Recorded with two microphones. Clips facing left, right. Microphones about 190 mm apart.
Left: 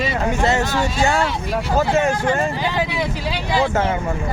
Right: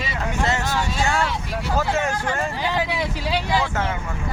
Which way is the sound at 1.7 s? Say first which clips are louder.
Left 5 dB; 20° left (ahead or behind).